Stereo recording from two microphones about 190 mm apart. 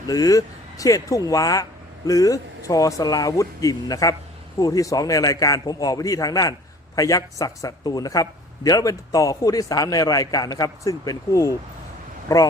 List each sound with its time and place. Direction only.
0.1 s speech: 20° left (ahead or behind)